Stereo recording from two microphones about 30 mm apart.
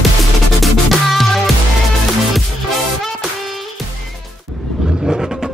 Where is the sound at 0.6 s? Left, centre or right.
Centre.